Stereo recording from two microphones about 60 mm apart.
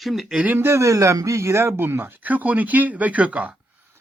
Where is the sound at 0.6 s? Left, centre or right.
Right.